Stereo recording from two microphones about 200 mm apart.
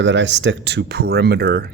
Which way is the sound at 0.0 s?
65° right (ahead or behind).